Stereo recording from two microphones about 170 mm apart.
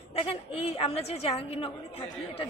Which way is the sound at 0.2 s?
35° left (ahead or behind).